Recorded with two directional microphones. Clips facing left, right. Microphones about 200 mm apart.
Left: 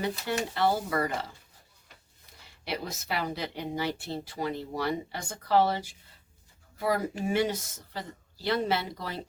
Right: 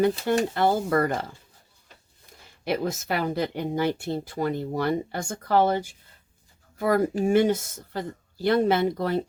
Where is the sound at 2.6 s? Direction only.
50° right (ahead or behind).